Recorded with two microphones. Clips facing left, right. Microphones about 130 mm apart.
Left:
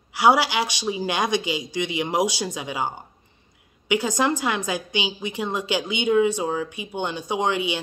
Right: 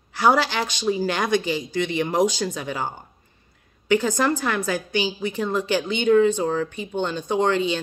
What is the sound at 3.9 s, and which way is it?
A woman's voice, 15° left (ahead or behind).